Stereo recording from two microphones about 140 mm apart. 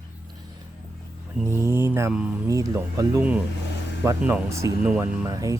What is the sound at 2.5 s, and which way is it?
Speech, 25° right (ahead or behind).